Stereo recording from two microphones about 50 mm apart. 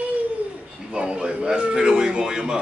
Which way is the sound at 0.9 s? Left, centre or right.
Centre.